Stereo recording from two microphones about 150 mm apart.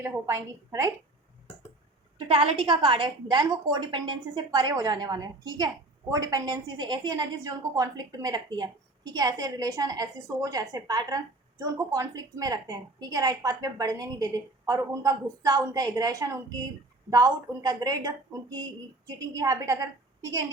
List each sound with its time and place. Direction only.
0.3 s a woman's voice: 20° right (ahead or behind)
2.1 s a woman's voice: 35° right (ahead or behind); by 20.4 s 20° right (ahead or behind)